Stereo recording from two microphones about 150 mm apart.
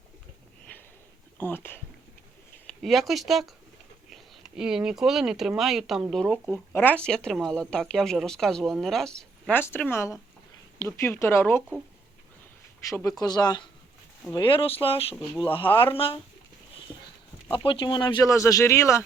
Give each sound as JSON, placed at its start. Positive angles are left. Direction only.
{"t": 1.4, "sound": "speech", "side_deg": 15}
{"t": 2.6, "sound": "speech", "side_deg": 0}
{"t": 12.8, "sound": "speech", "side_deg": 20}
{"t": 17.7, "sound": "speech", "side_deg": 35}
{"t": 18.3, "sound": "speech", "side_deg": 20}